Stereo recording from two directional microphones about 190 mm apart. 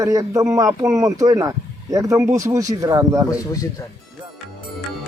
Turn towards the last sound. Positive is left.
turn(degrees=15)  # may be behind; listen again after turning